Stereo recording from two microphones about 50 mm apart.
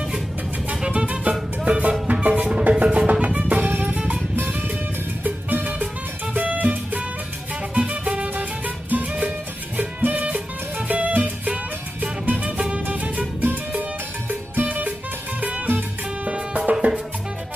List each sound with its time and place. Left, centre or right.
0.7 s music: right
1.3 s music: centre
1.8 s music: right
13.4 s music: right